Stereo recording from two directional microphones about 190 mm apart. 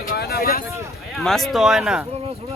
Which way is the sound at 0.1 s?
55° left (ahead or behind).